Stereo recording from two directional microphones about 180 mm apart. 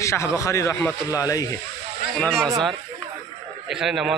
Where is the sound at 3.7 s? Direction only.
Centre (ahead or behind).